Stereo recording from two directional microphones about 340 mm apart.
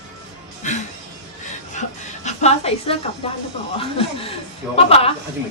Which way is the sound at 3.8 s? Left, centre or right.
Centre.